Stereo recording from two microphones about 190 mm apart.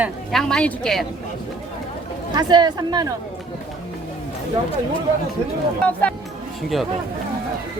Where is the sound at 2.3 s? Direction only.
20° right (ahead or behind).